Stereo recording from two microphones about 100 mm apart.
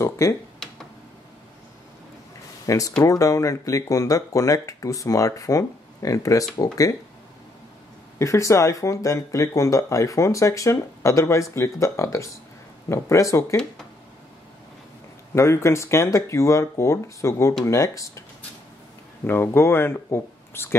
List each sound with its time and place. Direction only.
0.0 s speech: 30° left (ahead or behind)
2.6 s speech: 35° left (ahead or behind)
8.2 s speech: 30° left (ahead or behind)
15.3 s speech: 30° left (ahead or behind)
19.2 s speech: 25° left (ahead or behind)